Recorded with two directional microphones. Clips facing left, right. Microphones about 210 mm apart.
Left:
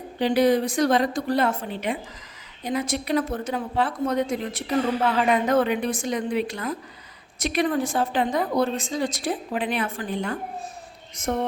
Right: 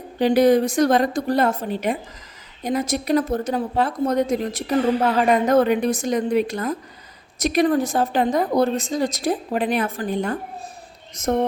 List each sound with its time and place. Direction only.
0.2 s a woman's voice: 45° right (ahead or behind)